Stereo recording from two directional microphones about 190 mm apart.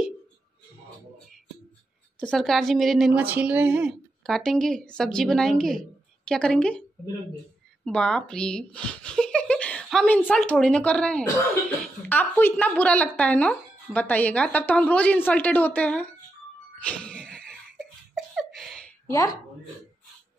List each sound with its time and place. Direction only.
2.1 s speech: 5° left (ahead or behind)
7.8 s a woman's voice: 5° left (ahead or behind)
16.8 s a sound: 5° left (ahead or behind)
19.0 s speech: 20° left (ahead or behind)